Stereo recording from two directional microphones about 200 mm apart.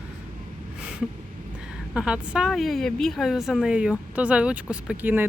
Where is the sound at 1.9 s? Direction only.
5° right (ahead or behind).